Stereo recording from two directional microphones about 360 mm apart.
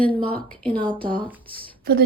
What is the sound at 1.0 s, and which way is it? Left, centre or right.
Speech, right.